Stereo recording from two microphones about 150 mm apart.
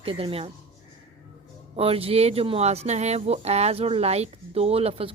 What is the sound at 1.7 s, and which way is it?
Speech, 40° right (ahead or behind).